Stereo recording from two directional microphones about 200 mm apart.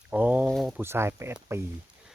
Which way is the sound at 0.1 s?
5° right (ahead or behind).